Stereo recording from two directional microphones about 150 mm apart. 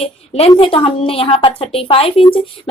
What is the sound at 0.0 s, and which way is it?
A woman's voice, 40° left (ahead or behind).